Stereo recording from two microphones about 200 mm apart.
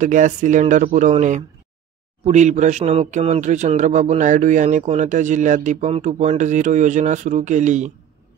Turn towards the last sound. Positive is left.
turn(degrees=-35)  # may be behind; listen again after turning